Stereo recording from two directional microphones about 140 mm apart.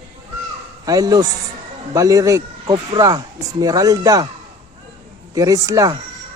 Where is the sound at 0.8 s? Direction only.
25° right (ahead or behind).